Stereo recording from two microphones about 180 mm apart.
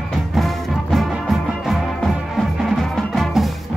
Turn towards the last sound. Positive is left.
turn(degrees=0)  # may be behind; listen again after turning